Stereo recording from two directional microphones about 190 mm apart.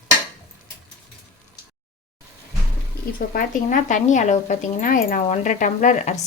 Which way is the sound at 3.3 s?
45° left (ahead or behind).